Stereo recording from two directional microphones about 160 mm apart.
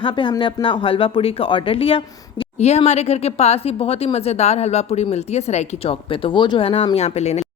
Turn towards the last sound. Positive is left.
turn(degrees=40)  # may be behind; listen again after turning